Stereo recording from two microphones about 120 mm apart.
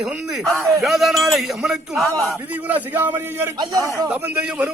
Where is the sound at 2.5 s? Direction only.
15° right (ahead or behind).